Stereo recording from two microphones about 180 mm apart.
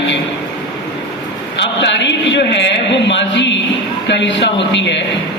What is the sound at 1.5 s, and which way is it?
A man's voice, 80° left.